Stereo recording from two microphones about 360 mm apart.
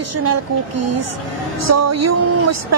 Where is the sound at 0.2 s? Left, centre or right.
Right.